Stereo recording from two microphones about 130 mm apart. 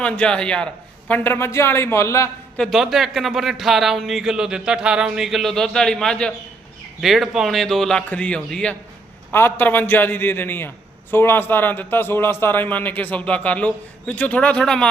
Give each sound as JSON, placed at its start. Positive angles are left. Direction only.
{"t": 0.0, "sound": "a man's voice", "side_deg": 5}
{"t": 2.6, "sound": "a man's voice", "side_deg": 0}